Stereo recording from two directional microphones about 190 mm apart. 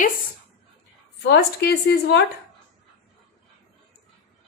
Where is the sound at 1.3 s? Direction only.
60° left (ahead or behind).